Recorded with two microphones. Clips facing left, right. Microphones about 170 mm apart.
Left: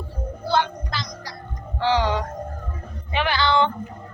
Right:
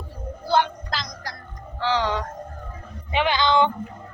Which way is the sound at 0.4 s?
15° right (ahead or behind).